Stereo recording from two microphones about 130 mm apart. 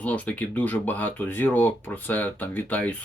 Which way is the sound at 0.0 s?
10° left (ahead or behind).